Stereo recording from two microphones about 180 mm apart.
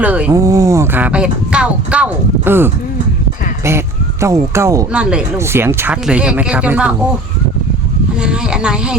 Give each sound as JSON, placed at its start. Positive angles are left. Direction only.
{"t": 0.0, "sound": "speech", "side_deg": -10}
{"t": 0.3, "sound": "speech", "side_deg": -20}
{"t": 4.9, "sound": "speech", "side_deg": -5}
{"t": 8.2, "sound": "speech", "side_deg": -5}